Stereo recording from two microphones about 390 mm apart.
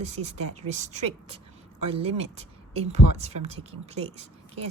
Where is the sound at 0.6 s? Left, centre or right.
Centre.